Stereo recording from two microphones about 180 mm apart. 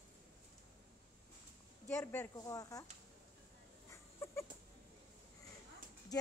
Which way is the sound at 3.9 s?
15° left (ahead or behind).